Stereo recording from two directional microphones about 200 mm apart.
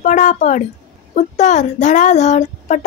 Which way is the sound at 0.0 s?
40° left (ahead or behind).